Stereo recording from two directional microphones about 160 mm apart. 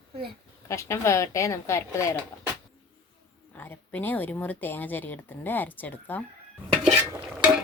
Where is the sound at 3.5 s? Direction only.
10° left (ahead or behind).